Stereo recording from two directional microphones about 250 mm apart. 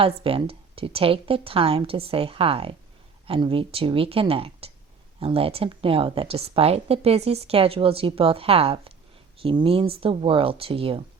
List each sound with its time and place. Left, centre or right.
0.0 s a woman's voice: right